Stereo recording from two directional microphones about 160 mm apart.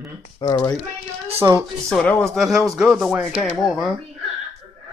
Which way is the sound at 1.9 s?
5° left (ahead or behind).